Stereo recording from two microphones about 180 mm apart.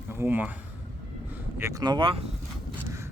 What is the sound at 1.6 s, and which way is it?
Speech, 20° right (ahead or behind).